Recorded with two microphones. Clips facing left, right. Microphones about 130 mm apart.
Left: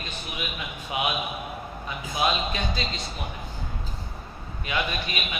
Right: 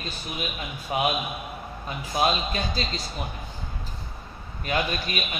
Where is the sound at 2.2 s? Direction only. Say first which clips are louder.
Right 1 dB; 40° right (ahead or behind).